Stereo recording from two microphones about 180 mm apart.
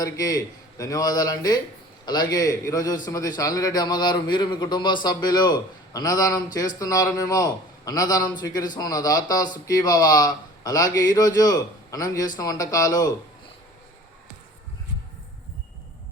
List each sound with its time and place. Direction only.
0.0 s a man's voice: 20° left (ahead or behind)